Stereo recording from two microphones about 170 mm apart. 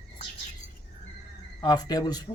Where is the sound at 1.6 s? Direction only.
25° left (ahead or behind).